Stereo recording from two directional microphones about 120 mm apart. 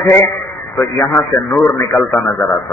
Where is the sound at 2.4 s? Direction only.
5° left (ahead or behind).